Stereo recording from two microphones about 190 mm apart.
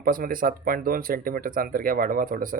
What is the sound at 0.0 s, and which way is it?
Speech, 50° right (ahead or behind).